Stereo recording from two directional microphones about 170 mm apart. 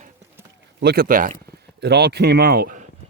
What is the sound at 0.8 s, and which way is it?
Speech, 60° right (ahead or behind).